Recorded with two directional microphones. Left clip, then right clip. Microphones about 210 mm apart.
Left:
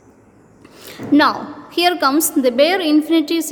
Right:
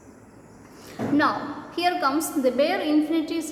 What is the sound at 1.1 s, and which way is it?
A woman's voice, 50° left (ahead or behind).